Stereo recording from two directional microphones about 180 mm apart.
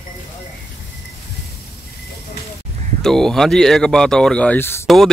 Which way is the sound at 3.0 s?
Centre (ahead or behind).